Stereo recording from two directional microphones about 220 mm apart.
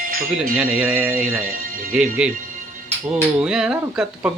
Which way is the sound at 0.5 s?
10° right (ahead or behind).